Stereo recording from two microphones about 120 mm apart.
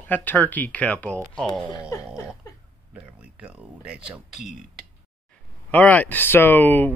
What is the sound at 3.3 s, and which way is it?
Speech, 10° right (ahead or behind).